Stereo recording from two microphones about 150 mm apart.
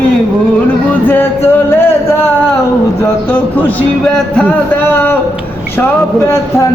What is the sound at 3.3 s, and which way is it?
Music, 10° left (ahead or behind).